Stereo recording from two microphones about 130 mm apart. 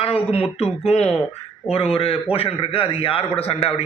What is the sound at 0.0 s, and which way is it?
A man's voice, 50° left (ahead or behind).